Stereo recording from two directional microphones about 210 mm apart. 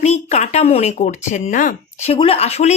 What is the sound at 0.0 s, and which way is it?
Speech, 30° left (ahead or behind).